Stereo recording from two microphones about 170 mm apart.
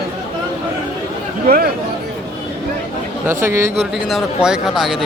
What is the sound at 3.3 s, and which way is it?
Speech, 15° right (ahead or behind).